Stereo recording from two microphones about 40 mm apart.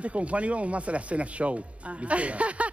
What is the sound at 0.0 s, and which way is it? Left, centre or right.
Speech, right.